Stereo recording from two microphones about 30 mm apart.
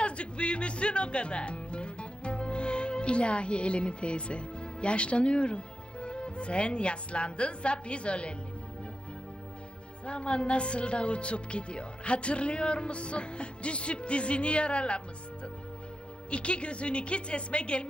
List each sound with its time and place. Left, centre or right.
0.0 s speech: left
10.1 s a woman's voice: left
16.3 s a woman's voice: left